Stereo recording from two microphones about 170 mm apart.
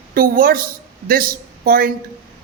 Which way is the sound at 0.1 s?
60° right (ahead or behind).